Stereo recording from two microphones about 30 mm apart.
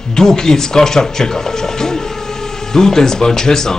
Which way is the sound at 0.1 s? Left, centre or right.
Centre.